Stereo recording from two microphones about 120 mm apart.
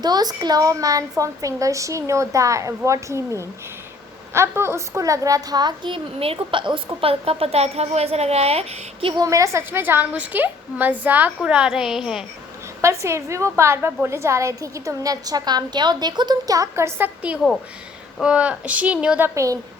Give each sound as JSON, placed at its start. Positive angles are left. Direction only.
{"t": 0.0, "sound": "a woman's voice", "side_deg": -35}
{"t": 9.1, "sound": "a woman's voice", "side_deg": -30}
{"t": 12.8, "sound": "a woman's voice", "side_deg": -25}
{"t": 18.2, "sound": "a woman's voice", "side_deg": -10}
{"t": 19.3, "sound": "a woman's voice", "side_deg": -25}